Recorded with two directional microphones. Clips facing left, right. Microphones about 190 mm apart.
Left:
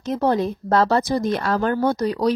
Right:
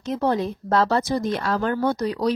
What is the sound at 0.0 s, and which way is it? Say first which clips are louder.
Speech: left 2 dB; 40° left (ahead or behind).